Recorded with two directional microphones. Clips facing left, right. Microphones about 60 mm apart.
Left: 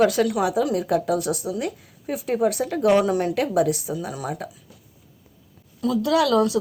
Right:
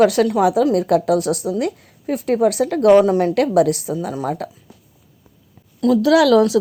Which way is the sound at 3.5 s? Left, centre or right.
Right.